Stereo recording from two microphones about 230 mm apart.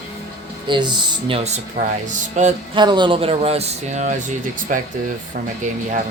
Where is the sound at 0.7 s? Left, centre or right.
Centre.